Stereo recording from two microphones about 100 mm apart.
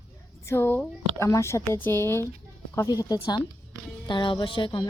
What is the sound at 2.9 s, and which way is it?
Speech, 40° left (ahead or behind).